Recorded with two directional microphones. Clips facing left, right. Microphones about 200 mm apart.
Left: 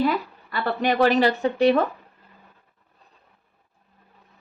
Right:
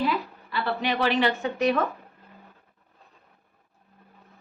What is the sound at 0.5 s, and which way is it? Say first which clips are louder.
A woman's voice: left 4 dB; 45° left (ahead or behind).